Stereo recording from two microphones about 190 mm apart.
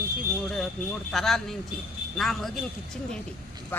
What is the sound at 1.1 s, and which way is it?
Speech, centre (ahead or behind).